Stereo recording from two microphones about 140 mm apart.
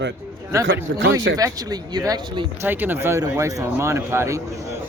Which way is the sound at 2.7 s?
15° right (ahead or behind).